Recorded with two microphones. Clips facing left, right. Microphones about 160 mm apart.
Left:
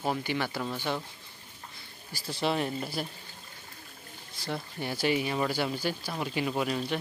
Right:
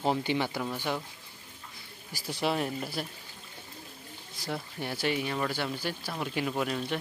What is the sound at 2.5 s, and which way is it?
Speech, centre (ahead or behind).